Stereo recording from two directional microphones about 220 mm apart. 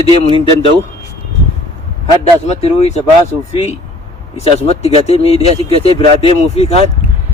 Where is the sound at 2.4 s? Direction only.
30° left (ahead or behind).